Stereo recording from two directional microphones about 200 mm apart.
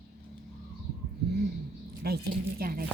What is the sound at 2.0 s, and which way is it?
Speech, 50° right (ahead or behind).